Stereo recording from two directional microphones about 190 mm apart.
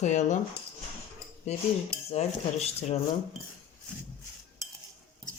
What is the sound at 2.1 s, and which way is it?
Speech, 35° left (ahead or behind).